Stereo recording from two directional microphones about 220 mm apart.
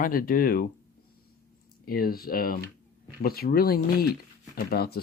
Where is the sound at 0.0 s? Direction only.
40° left (ahead or behind).